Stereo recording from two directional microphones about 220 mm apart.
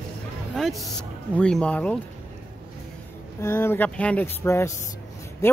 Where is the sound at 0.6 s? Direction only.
Centre (ahead or behind).